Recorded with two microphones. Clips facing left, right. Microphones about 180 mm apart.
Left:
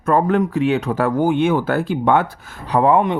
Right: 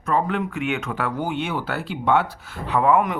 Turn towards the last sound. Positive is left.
turn(degrees=30)  # may be behind; listen again after turning